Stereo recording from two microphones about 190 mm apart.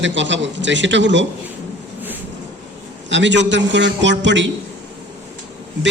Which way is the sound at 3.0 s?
70° right (ahead or behind).